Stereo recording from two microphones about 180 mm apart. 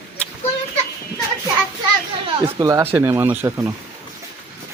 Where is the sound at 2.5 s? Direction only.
20° right (ahead or behind).